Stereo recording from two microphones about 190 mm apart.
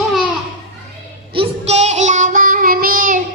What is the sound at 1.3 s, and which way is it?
Child singing, 30° right (ahead or behind).